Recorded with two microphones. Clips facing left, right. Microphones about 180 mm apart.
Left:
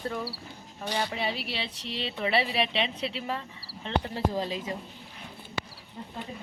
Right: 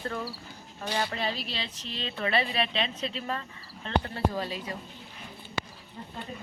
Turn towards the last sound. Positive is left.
turn(degrees=15)  # may be behind; listen again after turning